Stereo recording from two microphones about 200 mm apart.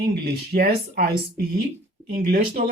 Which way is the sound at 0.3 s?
50° right (ahead or behind).